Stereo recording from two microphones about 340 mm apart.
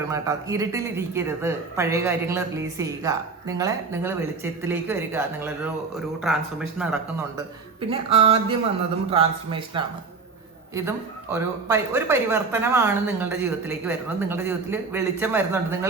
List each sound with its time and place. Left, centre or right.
0.1 s speech: centre
7.8 s speech: centre